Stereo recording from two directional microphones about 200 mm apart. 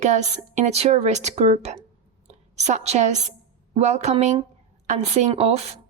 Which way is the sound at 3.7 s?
35° right (ahead or behind).